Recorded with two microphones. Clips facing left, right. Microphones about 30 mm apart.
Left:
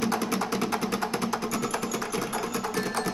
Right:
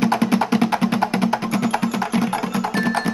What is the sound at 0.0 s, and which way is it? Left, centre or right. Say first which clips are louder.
Music: right 9 dB; right.